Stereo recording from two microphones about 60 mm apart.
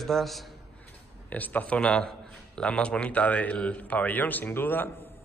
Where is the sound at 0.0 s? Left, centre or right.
Centre.